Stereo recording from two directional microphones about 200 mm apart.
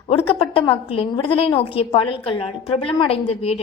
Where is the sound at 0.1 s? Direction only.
25° left (ahead or behind).